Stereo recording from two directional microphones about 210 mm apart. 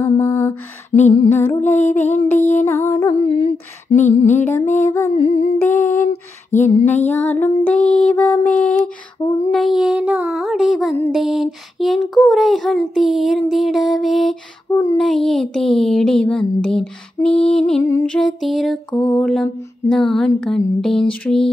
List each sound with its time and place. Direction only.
0.0 s music: 10° left (ahead or behind)
0.9 s humming: 30° left (ahead or behind)
1.3 s music: 10° left (ahead or behind)
3.2 s humming: 25° left (ahead or behind)
3.9 s a sound: 30° left (ahead or behind)
4.7 s music: 10° left (ahead or behind)
5.1 s humming: 30° left (ahead or behind)
5.6 s music: 10° left (ahead or behind)
7.1 s a sound: 10° left (ahead or behind)